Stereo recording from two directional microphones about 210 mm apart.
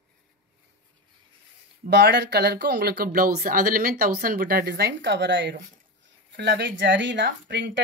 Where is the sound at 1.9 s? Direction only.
55° right (ahead or behind).